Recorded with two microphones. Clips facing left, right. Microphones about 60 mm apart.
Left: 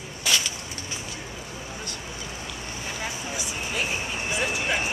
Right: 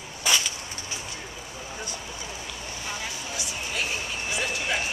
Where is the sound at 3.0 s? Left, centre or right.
Centre.